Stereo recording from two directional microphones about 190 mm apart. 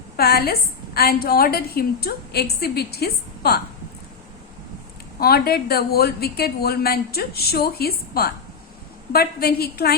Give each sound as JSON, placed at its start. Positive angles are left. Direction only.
{"t": 0.2, "sound": "a woman's voice", "side_deg": 55}
{"t": 5.2, "sound": "a woman's voice", "side_deg": 55}